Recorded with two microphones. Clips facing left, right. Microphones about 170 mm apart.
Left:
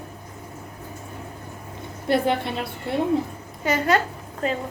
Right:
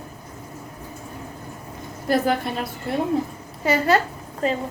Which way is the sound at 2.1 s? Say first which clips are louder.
Even; 25° left (ahead or behind).